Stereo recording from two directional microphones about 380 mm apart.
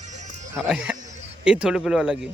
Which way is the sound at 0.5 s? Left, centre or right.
Centre.